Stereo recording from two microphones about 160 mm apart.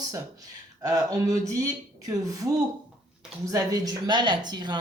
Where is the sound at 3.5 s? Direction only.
20° right (ahead or behind).